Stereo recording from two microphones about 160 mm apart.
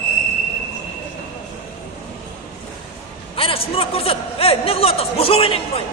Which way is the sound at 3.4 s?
35° left (ahead or behind).